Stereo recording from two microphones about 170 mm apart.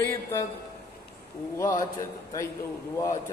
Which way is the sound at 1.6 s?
20° left (ahead or behind).